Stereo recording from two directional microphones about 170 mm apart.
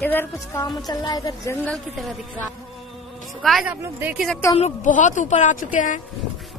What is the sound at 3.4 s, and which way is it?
Speech, 5° right (ahead or behind).